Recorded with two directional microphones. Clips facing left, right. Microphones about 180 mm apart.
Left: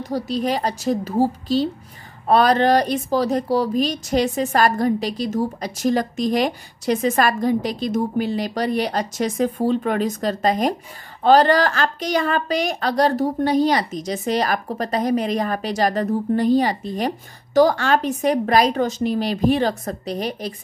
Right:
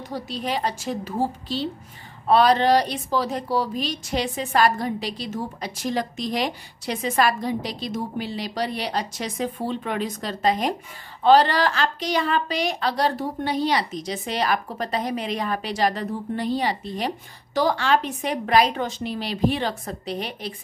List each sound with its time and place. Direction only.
0.0 s a woman's voice: 40° left (ahead or behind)